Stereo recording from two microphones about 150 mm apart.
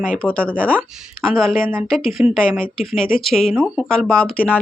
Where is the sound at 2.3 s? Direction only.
5° left (ahead or behind).